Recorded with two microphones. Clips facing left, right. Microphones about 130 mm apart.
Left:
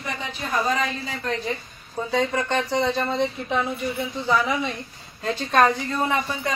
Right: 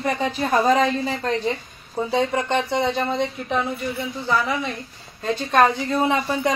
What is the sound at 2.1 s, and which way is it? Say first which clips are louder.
Speech: right 2 dB; 20° right (ahead or behind).